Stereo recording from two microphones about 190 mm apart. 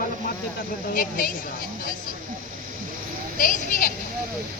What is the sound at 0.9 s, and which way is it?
Speech, 45° left (ahead or behind).